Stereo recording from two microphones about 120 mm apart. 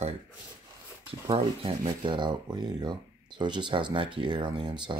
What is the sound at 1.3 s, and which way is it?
Speech, 45° right (ahead or behind).